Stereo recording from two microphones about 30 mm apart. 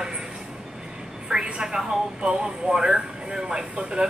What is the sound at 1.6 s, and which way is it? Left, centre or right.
Speech, right.